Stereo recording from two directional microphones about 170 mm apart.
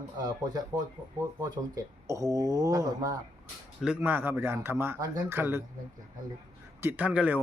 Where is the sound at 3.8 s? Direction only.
10° right (ahead or behind).